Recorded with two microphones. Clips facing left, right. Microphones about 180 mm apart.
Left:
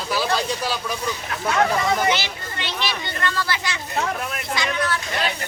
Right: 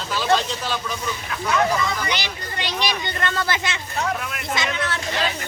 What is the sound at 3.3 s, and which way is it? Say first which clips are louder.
Speech: right 1 dB; 55° right (ahead or behind).